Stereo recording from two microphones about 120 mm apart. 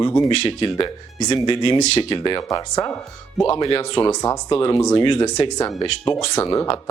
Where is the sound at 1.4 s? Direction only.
45° left (ahead or behind).